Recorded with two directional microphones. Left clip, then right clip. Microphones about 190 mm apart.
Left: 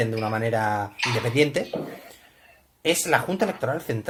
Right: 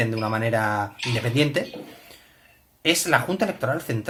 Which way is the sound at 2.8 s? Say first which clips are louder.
Right 1 dB; 15° left (ahead or behind).